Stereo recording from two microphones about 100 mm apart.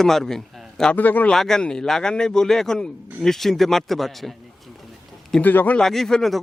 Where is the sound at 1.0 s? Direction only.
15° left (ahead or behind).